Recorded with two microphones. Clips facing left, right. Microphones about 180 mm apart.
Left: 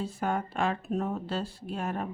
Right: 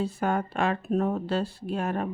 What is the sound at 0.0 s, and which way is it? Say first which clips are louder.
Speech: right 4 dB; 65° right (ahead or behind).